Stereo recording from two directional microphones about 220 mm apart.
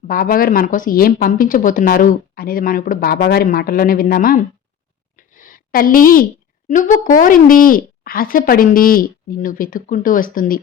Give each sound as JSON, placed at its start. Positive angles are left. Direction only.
{"t": 0.1, "sound": "speech", "side_deg": 40}
{"t": 5.1, "sound": "a sound", "side_deg": 40}
{"t": 6.7, "sound": "speech", "side_deg": 35}